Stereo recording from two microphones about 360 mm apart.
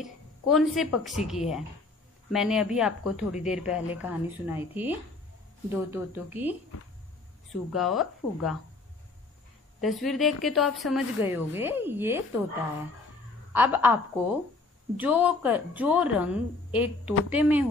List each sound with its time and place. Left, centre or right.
0.0 s speech: centre
7.7 s speech: centre
9.8 s speech: centre
13.5 s a woman's voice: centre
15.0 s speech: centre